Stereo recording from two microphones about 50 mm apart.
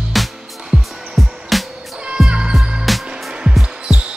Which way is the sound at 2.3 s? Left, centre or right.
Centre.